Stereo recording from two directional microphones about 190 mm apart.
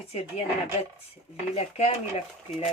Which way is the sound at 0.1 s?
30° left (ahead or behind).